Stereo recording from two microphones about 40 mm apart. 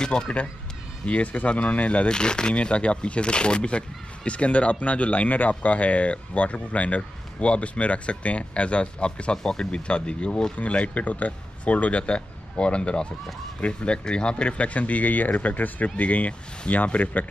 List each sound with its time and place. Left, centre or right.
0.0 s speech: left
1.0 s speech: left
2.0 s speech: left
9.4 s speech: centre
9.7 s speech: left